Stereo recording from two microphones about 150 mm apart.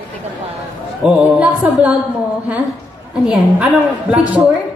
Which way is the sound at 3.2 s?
5° right (ahead or behind).